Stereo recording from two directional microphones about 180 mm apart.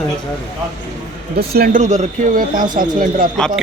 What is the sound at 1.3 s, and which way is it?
Speech, 60° right (ahead or behind).